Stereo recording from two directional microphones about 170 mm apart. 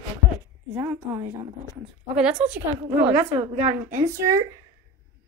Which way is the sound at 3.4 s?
45° right (ahead or behind).